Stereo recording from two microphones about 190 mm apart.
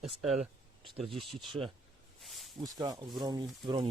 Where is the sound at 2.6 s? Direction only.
20° right (ahead or behind).